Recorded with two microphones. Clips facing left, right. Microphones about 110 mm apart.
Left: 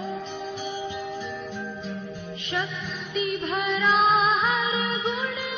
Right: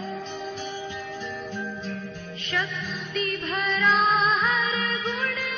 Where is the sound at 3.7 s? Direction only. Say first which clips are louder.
Left 1 dB; centre (ahead or behind).